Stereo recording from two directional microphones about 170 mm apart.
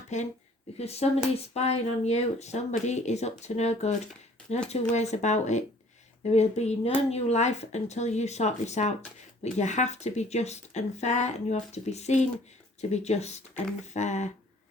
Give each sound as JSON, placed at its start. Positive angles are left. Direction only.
{"t": 0.1, "sound": "speech", "side_deg": 45}